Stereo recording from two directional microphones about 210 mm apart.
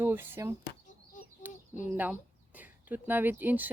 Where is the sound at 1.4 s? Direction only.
10° right (ahead or behind).